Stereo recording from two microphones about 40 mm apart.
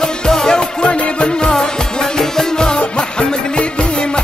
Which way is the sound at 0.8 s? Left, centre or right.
Left.